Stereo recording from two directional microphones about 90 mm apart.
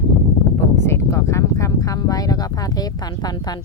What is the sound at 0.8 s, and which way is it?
A woman's voice, 30° left (ahead or behind).